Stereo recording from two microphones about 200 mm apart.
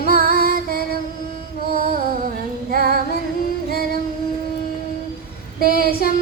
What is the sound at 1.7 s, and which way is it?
Music, 45° right (ahead or behind).